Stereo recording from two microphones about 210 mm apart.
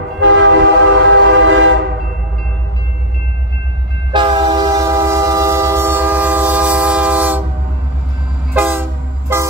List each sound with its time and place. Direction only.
0.2 s train: 60° right (ahead or behind)
4.1 s train: 20° right (ahead or behind)
8.5 s train: 10° right (ahead or behind)